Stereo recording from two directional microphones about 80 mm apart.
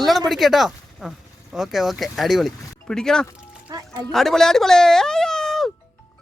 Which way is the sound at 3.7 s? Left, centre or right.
Right.